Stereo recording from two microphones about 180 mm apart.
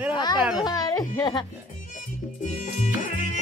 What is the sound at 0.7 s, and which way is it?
Speech, 20° left (ahead or behind).